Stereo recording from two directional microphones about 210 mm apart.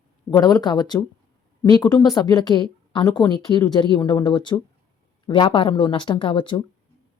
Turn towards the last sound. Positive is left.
turn(degrees=25)  # may be behind; listen again after turning